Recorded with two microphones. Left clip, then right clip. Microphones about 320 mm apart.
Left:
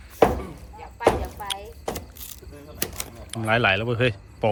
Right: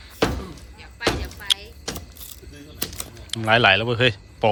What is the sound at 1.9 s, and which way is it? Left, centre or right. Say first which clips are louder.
Vehicle: left 2 dB; left.